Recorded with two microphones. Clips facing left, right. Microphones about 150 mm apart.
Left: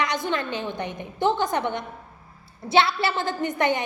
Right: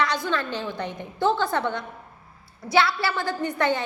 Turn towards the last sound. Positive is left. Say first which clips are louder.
# left 1 dB
turn(degrees=20)  # may be behind; listen again after turning